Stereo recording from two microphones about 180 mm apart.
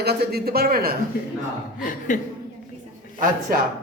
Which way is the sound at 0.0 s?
65° right (ahead or behind).